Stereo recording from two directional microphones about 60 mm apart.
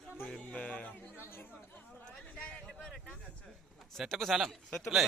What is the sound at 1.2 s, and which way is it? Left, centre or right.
Chatter, left.